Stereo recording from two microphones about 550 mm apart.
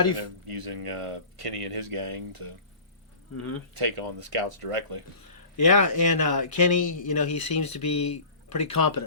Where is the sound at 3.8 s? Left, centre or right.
Right.